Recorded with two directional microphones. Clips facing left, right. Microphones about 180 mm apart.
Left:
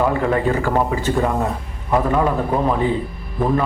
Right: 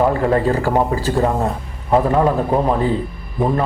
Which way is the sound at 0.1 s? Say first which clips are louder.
Right 2 dB; 35° right (ahead or behind).